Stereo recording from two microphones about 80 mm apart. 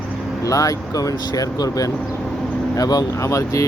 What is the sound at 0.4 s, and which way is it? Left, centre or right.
Speech, left.